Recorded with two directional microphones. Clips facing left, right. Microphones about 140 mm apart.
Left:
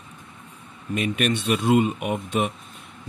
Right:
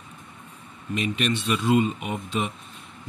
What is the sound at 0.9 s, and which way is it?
Speech, 50° left (ahead or behind).